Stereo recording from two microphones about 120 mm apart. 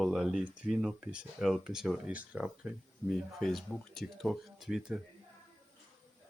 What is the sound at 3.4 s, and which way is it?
Speech, 5° left (ahead or behind).